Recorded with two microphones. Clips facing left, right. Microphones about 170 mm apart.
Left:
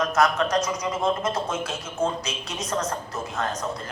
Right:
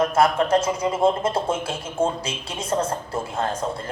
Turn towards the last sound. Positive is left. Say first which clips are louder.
# right 3 dB
turn(degrees=-30)  # may be behind; listen again after turning